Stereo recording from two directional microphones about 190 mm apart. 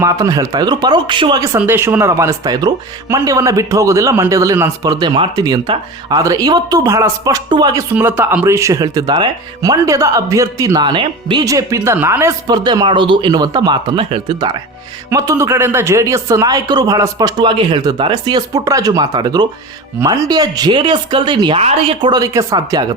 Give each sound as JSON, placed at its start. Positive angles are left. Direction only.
{"t": 0.0, "sound": "speech", "side_deg": -20}
{"t": 1.5, "sound": "speech", "side_deg": -10}